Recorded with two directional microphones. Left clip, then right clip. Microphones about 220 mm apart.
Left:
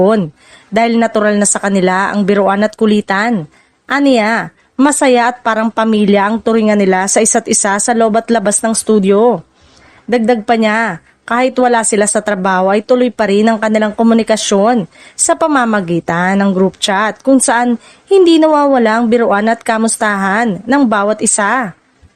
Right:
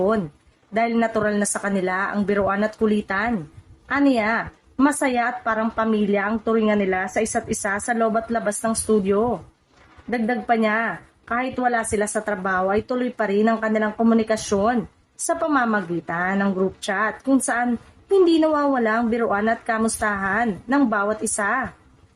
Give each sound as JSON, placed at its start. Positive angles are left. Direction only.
{"t": 0.7, "sound": "a woman's voice", "side_deg": 40}